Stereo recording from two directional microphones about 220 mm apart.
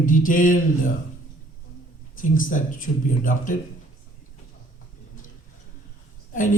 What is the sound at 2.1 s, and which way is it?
Speech, 35° left (ahead or behind).